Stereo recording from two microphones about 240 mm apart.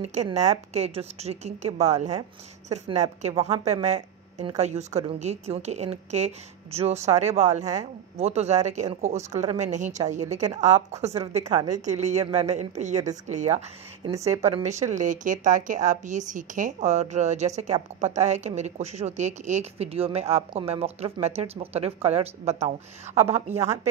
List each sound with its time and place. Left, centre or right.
0.0 s a woman's voice: right